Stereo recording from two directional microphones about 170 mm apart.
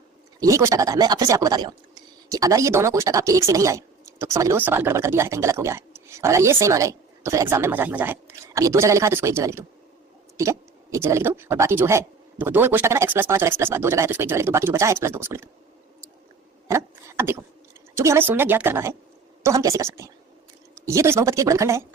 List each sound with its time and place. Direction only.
0.3 s speech: 20° right (ahead or behind)
16.6 s speech: 15° right (ahead or behind)